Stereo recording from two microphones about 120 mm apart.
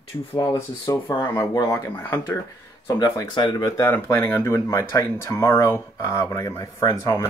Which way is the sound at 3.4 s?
35° left (ahead or behind).